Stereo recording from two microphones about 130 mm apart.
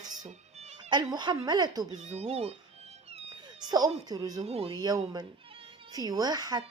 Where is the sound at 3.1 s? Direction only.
50° right (ahead or behind).